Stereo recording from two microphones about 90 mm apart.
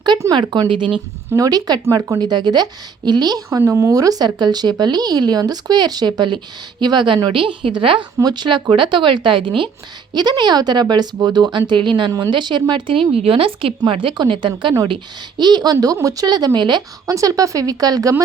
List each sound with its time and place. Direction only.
0.7 s speech: 65° right (ahead or behind)
1.3 s speech: 45° right (ahead or behind)
1.8 s speech: 35° right (ahead or behind)
2.1 s speech: 55° right (ahead or behind)
3.6 s speech: 30° right (ahead or behind); by 7.2 s 60° right (ahead or behind)
7.3 s a woman's voice: 70° right (ahead or behind)
8.2 s speech: 50° right (ahead or behind)
10.2 s speech: 55° right (ahead or behind)
12.9 s speech: 85° right; by 14.8 s 65° right (ahead or behind)
15.4 s speech: 50° right (ahead or behind)
17.1 s speech: 40° right (ahead or behind)